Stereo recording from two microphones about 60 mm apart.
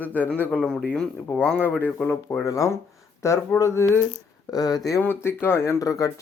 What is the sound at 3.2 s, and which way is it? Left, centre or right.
Speech, left.